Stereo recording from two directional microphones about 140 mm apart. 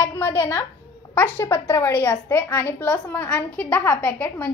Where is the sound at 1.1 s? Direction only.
15° left (ahead or behind).